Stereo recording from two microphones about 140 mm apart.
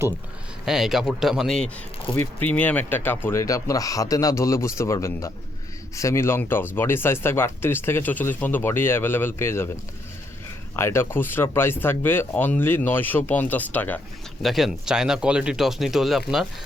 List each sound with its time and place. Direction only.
0.6 s speech: centre (ahead or behind); by 9.6 s 15° left (ahead or behind)
10.8 s speech: 20° left (ahead or behind)
14.4 s speech: centre (ahead or behind)